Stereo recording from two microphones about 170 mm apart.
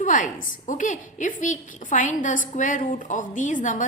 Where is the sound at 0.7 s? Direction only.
50° left (ahead or behind).